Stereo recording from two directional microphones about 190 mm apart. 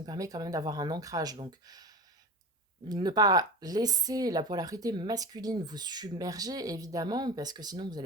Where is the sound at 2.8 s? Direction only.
20° right (ahead or behind).